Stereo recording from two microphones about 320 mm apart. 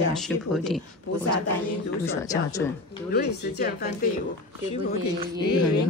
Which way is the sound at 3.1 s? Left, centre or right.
Left.